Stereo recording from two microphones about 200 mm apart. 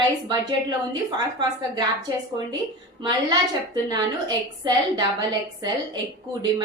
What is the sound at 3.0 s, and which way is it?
A woman's voice, 20° right (ahead or behind).